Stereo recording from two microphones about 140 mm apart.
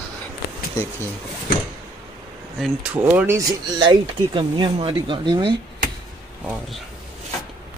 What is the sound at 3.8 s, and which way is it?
Speech, 35° right (ahead or behind).